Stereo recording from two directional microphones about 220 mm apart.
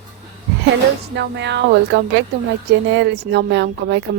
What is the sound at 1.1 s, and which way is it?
A woman's voice, 50° right (ahead or behind).